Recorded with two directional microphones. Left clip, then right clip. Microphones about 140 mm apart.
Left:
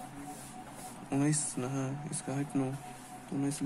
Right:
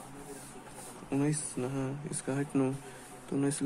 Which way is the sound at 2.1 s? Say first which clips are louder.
Right 3 dB; 25° right (ahead or behind).